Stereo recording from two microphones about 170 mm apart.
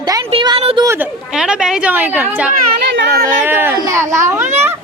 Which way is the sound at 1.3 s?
5° right (ahead or behind).